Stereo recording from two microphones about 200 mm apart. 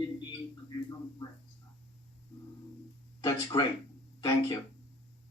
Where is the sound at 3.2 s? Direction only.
20° left (ahead or behind).